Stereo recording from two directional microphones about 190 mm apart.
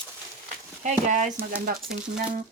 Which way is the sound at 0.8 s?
40° right (ahead or behind).